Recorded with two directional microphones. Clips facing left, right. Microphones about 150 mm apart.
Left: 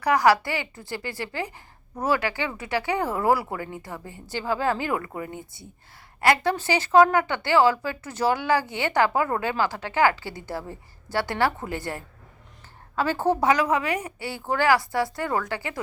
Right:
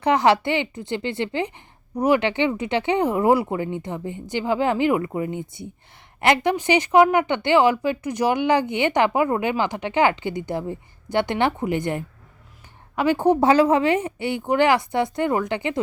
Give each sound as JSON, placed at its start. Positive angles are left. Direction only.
{"t": 0.0, "sound": "a woman's voice", "side_deg": -25}
{"t": 13.4, "sound": "speech", "side_deg": -30}